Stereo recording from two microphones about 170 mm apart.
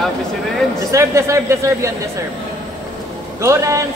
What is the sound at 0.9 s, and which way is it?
Speech, 15° right (ahead or behind).